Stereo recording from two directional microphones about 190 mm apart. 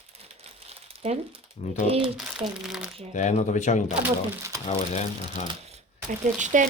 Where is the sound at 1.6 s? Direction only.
35° left (ahead or behind).